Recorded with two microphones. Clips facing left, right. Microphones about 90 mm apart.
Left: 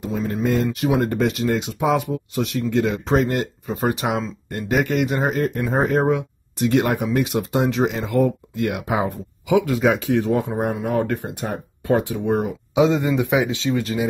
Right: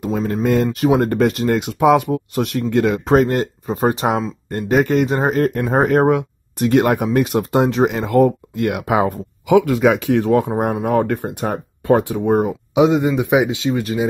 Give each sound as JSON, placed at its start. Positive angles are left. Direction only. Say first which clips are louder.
{"t": 0.0, "sound": "speech", "louder": "right 4 dB", "side_deg": -55}
{"t": 0.7, "sound": "speech", "louder": "right 5 dB", "side_deg": -45}
{"t": 5.6, "sound": "speech", "louder": "right 4 dB", "side_deg": -60}
{"t": 12.7, "sound": "speech", "louder": "right 3 dB", "side_deg": -20}